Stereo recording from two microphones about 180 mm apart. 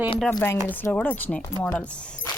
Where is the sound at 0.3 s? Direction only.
15° left (ahead or behind).